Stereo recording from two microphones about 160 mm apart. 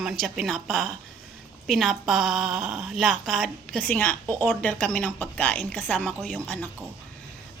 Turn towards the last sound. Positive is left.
turn(degrees=10)  # may be behind; listen again after turning